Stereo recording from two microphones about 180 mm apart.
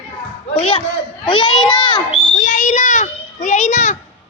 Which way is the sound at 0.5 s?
30° left (ahead or behind).